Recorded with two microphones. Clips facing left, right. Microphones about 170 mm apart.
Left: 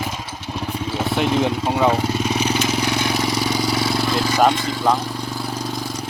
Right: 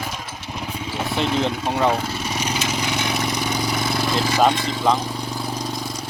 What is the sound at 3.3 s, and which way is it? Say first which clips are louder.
Vehicle: left 3 dB; 20° right (ahead or behind).